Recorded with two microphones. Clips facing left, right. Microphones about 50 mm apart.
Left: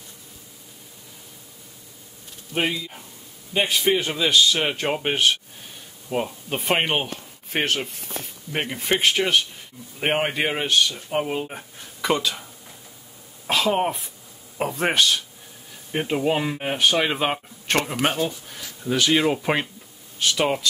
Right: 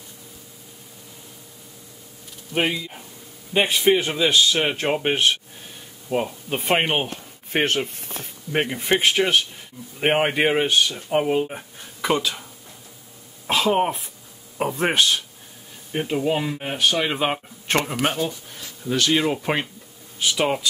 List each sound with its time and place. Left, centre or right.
2.5 s speech: centre
13.5 s speech: centre
15.9 s speech: centre
17.2 s speech: centre